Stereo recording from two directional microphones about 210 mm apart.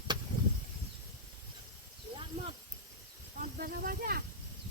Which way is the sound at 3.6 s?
45° right (ahead or behind).